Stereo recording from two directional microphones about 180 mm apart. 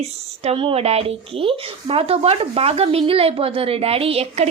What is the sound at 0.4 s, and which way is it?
Speech, 30° right (ahead or behind).